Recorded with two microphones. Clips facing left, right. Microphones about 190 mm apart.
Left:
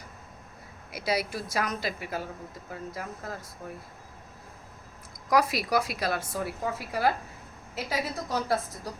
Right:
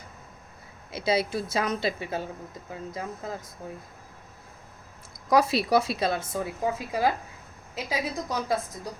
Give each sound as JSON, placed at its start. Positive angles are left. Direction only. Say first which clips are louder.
{"t": 0.9, "sound": "a woman's voice", "louder": "right 4 dB", "side_deg": -25}
{"t": 5.3, "sound": "a woman's voice", "louder": "right 3 dB", "side_deg": -25}